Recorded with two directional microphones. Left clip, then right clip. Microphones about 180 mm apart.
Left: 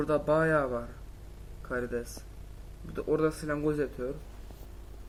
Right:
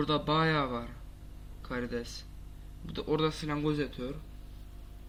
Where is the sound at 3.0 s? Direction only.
5° right (ahead or behind).